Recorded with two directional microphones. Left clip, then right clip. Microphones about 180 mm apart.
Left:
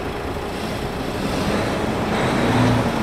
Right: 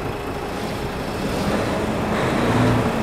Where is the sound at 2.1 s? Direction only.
55° right (ahead or behind).